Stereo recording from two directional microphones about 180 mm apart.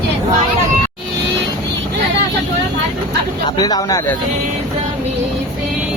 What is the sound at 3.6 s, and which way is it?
Speech, 20° left (ahead or behind).